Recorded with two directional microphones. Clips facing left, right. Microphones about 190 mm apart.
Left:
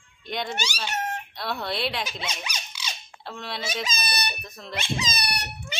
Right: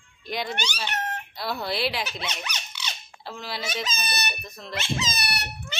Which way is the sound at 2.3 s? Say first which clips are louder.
Even; 10° left (ahead or behind).